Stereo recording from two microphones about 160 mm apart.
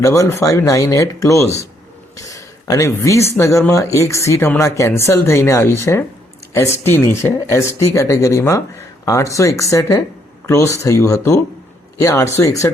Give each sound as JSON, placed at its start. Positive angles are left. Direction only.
{"t": 0.0, "sound": "speech", "side_deg": 20}